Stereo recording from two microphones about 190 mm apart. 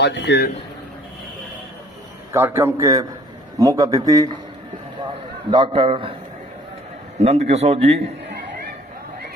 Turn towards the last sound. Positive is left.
turn(degrees=-35)  # may be behind; listen again after turning